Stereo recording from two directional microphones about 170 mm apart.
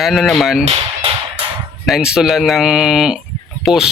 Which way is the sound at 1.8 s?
Centre (ahead or behind).